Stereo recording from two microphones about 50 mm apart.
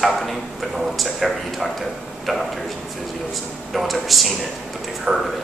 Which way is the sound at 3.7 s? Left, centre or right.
Centre.